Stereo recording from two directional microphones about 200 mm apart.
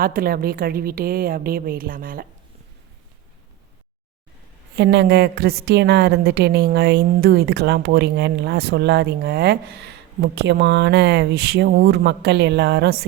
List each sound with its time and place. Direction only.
0.0 s a woman's voice: 45° right (ahead or behind)
4.8 s a woman's voice: 60° right (ahead or behind)